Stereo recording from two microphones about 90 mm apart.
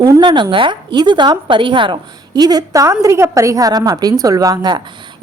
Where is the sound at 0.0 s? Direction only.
55° right (ahead or behind).